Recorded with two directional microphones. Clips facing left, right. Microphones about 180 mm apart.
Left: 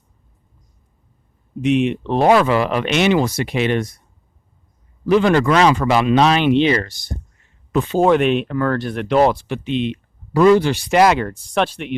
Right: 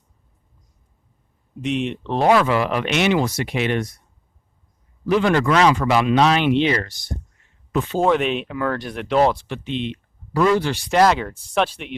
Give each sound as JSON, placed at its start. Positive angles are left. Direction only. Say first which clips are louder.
{"t": 1.6, "sound": "speech", "louder": "left 6 dB", "side_deg": 5}
{"t": 2.3, "sound": "speech", "louder": "left 1 dB", "side_deg": 30}
{"t": 5.0, "sound": "speech", "louder": "left 3 dB", "side_deg": 30}
{"t": 8.0, "sound": "speech", "louder": "left 5 dB", "side_deg": 0}
{"t": 9.2, "sound": "speech", "louder": "left 3 dB", "side_deg": 10}
{"t": 11.2, "sound": "speech", "louder": "left 2 dB", "side_deg": -5}